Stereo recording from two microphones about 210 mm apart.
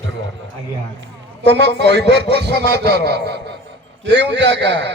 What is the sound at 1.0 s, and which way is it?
A man's voice, 55° right (ahead or behind).